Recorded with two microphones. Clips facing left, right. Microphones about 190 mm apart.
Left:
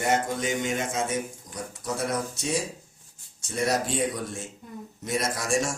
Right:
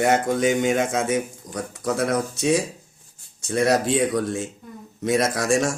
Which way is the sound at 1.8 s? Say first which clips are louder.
Right 6 dB; 90° right.